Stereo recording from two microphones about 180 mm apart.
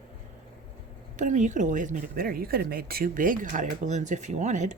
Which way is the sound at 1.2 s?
45° right (ahead or behind).